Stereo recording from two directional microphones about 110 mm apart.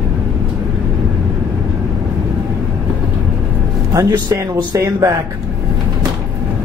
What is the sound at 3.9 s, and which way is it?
Speech, 30° right (ahead or behind).